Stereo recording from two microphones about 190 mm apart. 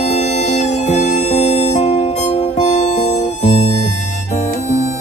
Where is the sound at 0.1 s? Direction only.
35° left (ahead or behind).